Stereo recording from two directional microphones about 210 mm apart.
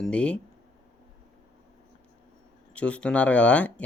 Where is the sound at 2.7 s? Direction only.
5° left (ahead or behind).